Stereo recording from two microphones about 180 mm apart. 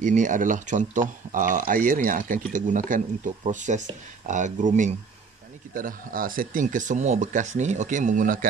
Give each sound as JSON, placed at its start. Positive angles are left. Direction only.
{"t": 0.0, "sound": "speech", "side_deg": -45}